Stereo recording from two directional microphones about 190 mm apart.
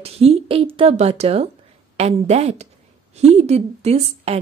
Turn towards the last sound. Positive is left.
turn(degrees=-35)  # may be behind; listen again after turning